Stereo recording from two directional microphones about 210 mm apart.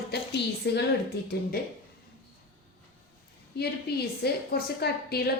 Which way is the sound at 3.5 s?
50° left (ahead or behind).